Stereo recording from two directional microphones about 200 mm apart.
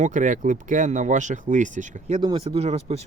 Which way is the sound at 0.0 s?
35° right (ahead or behind).